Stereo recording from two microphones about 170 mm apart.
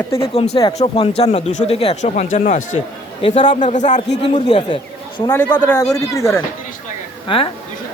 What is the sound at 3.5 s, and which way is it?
Speech, 45° left (ahead or behind).